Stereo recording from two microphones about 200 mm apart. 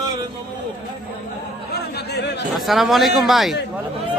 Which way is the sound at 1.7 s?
55° left (ahead or behind).